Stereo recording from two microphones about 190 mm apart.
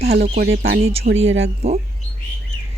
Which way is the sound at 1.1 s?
80° right.